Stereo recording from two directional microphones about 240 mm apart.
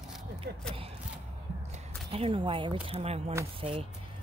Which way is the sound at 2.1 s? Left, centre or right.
Right.